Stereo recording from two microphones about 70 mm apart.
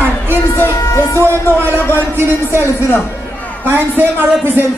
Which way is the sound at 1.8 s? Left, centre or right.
Left.